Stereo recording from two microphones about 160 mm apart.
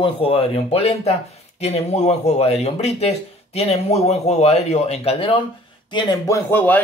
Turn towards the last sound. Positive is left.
turn(degrees=15)  # may be behind; listen again after turning